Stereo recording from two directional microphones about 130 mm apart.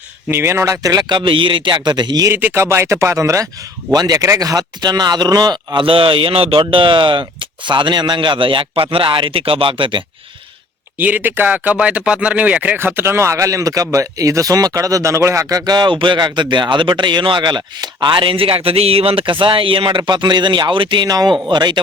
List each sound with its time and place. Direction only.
0.3 s speech: 20° right (ahead or behind)
2.3 s speech: 15° right (ahead or behind); by 10.0 s 40° right (ahead or behind)
10.9 s speech: 15° right (ahead or behind); by 21.8 s 35° right (ahead or behind)